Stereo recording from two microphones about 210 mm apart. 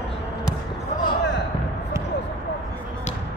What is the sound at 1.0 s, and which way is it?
Basketball bounce, 60° left (ahead or behind).